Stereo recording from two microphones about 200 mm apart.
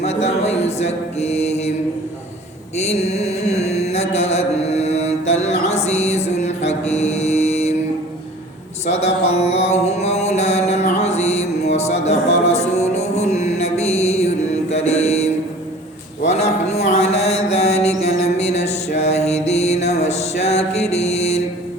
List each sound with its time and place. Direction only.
0.0 s mantra: 30° left (ahead or behind)
2.7 s mantra: 35° left (ahead or behind)
8.9 s mantra: 35° left (ahead or behind)
10.9 s music: 35° left (ahead or behind)
16.2 s mantra: 35° left (ahead or behind)
18.3 s music: 35° left (ahead or behind)